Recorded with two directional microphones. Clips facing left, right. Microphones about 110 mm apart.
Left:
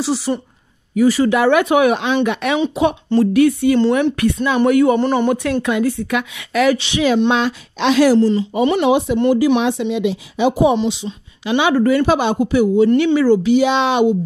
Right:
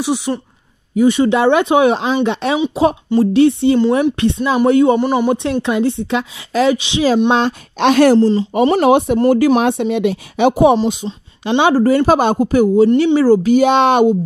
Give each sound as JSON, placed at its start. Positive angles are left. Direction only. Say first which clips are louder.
{"t": 0.0, "sound": "speech", "louder": "right 1 dB", "side_deg": -15}
{"t": 4.9, "sound": "speech", "louder": "right 1 dB", "side_deg": -10}
{"t": 5.3, "sound": "speech", "louder": "right 1 dB", "side_deg": -25}
{"t": 6.7, "sound": "speech", "louder": "right 1 dB", "side_deg": -20}
{"t": 7.3, "sound": "speech", "louder": "right 3 dB", "side_deg": -45}
{"t": 8.2, "sound": "speech", "louder": "right 2 dB", "side_deg": -30}
{"t": 8.9, "sound": "a woman's voice", "louder": "right 3 dB", "side_deg": -60}
{"t": 10.8, "sound": "speech", "louder": "right 2 dB", "side_deg": -45}
{"t": 11.1, "sound": "speech", "louder": "right 2 dB", "side_deg": -35}